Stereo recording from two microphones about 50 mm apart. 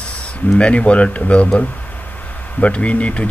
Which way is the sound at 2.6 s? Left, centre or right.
Left.